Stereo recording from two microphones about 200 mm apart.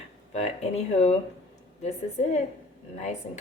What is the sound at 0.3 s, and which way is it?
Speech, 35° left (ahead or behind).